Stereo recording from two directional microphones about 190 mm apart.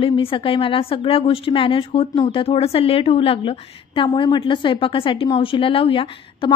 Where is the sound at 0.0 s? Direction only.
30° left (ahead or behind).